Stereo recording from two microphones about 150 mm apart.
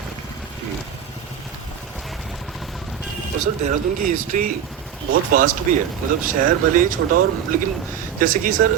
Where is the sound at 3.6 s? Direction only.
55° right (ahead or behind).